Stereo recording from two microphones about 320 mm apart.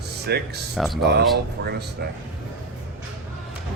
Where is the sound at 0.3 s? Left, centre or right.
Right.